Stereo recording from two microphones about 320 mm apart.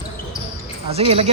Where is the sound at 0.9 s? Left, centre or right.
Centre.